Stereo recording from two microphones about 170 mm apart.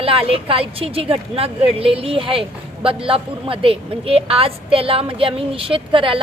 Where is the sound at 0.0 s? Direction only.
35° right (ahead or behind).